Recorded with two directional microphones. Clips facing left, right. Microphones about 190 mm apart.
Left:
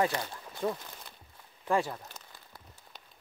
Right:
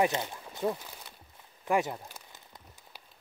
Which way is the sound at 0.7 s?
10° right (ahead or behind).